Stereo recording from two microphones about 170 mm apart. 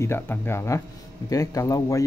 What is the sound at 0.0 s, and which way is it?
Speech, 15° left (ahead or behind).